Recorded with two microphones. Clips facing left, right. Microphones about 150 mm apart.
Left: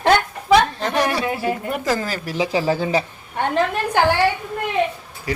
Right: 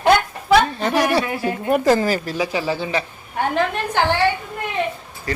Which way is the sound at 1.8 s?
25° right (ahead or behind).